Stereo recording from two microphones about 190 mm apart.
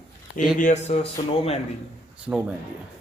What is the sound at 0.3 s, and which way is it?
Speech, 40° left (ahead or behind).